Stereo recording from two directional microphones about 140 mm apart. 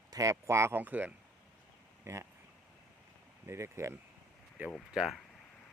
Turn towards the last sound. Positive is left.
turn(degrees=0)  # may be behind; listen again after turning